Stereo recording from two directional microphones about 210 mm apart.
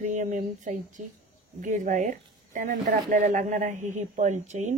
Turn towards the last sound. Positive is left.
turn(degrees=-35)  # may be behind; listen again after turning